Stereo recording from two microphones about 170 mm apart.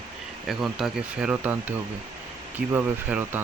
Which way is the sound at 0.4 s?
Centre (ahead or behind).